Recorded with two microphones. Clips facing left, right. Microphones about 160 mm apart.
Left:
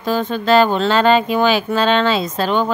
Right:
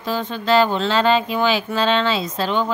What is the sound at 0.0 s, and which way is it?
Speech, 50° left (ahead or behind).